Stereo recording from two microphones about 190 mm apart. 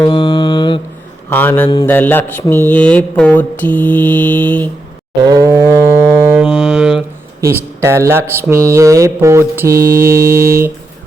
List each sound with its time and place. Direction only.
0.0 s mantra: 20° left (ahead or behind)
1.3 s mantra: 10° left (ahead or behind)
5.2 s a sound: 15° right (ahead or behind)
6.3 s mantra: 5° right (ahead or behind)
7.4 s speech: 15° right (ahead or behind)